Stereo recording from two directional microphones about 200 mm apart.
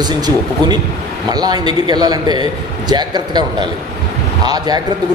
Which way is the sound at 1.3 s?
20° right (ahead or behind).